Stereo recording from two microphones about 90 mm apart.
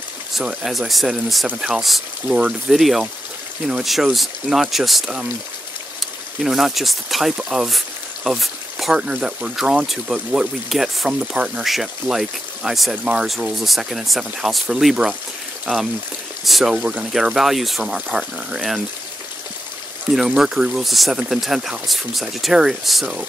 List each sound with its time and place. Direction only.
0.3 s speech: 10° right (ahead or behind)
2.2 s speech: 15° right (ahead or behind)
2.7 s speech: centre (ahead or behind)
16.4 s speech: centre (ahead or behind)
16.7 s speech: 15° right (ahead or behind)
20.1 s speech: 5° right (ahead or behind)